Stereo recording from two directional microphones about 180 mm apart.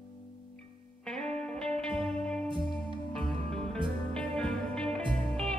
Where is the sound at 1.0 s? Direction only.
5° left (ahead or behind).